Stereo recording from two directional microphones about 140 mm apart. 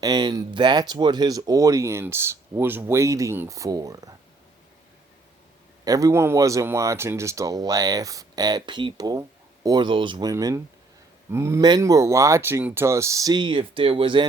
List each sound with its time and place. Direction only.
0.0 s speech: 30° right (ahead or behind)
5.8 s speech: 25° right (ahead or behind)